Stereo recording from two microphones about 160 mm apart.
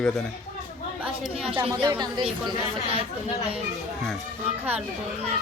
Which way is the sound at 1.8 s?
25° right (ahead or behind).